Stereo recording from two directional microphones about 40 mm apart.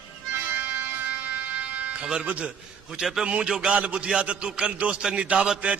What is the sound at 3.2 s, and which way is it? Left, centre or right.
A man's voice, right.